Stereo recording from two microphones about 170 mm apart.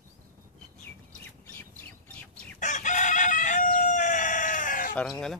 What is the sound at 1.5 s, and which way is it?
Bird, 10° left (ahead or behind).